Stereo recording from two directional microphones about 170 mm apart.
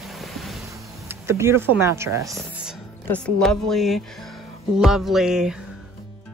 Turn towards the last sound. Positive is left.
turn(degrees=-5)  # may be behind; listen again after turning